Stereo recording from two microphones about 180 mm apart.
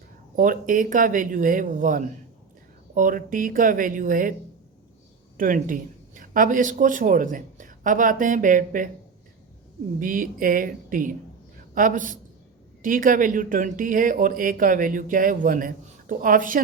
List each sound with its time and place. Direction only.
0.3 s speech: 50° right (ahead or behind)
5.4 s speech: 50° right (ahead or behind)
10.0 s a woman's voice: 50° right (ahead or behind)